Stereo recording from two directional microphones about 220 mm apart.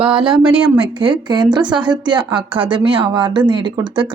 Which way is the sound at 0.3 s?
20° right (ahead or behind).